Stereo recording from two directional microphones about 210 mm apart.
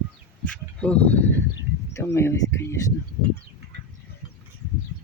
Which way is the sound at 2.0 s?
10° left (ahead or behind).